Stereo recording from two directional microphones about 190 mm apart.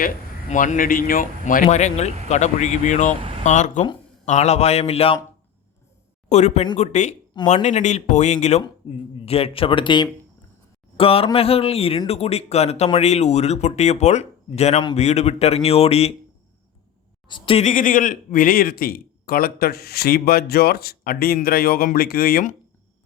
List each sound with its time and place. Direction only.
0.5 s a man's voice: 45° left (ahead or behind)
6.2 s speech: 35° left (ahead or behind)
8.8 s speech: 25° left (ahead or behind)
17.2 s speech: 25° left (ahead or behind)
17.7 s a man's voice: 45° left (ahead or behind)